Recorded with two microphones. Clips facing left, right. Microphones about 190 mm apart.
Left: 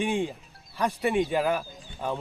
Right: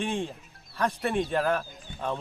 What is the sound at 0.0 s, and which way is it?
Speech, 15° left (ahead or behind).